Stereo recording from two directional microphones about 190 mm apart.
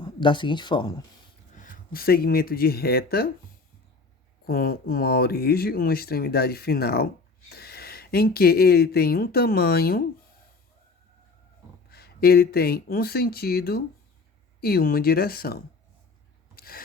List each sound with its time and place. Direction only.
0.0 s speech: 25° left (ahead or behind)
1.5 s speech: 45° left (ahead or behind)
4.4 s speech: 55° left (ahead or behind)
11.9 s speech: 55° left (ahead or behind)
16.6 s rub: 50° left (ahead or behind)